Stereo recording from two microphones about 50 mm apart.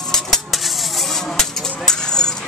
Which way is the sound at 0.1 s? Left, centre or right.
Centre.